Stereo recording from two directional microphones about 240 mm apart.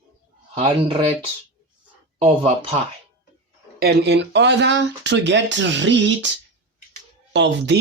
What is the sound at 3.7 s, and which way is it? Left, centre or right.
Speech, right.